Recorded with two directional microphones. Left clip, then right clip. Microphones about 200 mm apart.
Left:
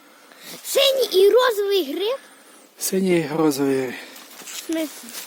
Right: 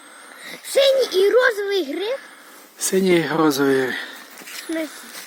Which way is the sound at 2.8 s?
10° left (ahead or behind).